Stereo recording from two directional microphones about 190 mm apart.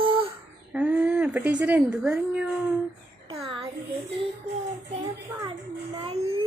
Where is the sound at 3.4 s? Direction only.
30° right (ahead or behind).